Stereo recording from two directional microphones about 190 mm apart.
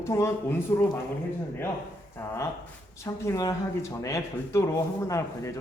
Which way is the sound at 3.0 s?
15° left (ahead or behind).